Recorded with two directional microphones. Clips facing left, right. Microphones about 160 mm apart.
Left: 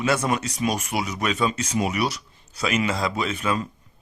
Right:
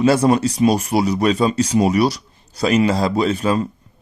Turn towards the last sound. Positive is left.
turn(degrees=-35)  # may be behind; listen again after turning